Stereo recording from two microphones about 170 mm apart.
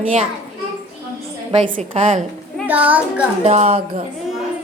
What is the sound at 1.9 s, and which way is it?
Speech, 35° right (ahead or behind).